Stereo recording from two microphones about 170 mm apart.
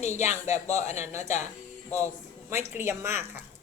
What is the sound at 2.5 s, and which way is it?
Speech, 45° left (ahead or behind).